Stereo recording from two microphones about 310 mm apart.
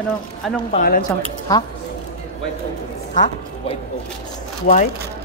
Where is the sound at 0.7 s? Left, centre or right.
Left.